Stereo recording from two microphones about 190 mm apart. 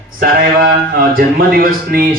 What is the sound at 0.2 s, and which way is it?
A man's voice, 50° right (ahead or behind).